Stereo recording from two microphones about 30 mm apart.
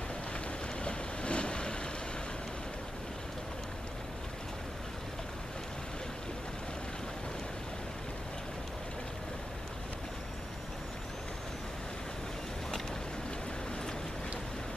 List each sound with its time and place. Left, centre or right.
0.8 s vehicle: left